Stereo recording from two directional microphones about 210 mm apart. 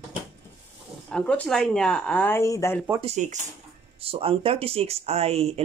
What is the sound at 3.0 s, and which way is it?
Speech, 35° right (ahead or behind).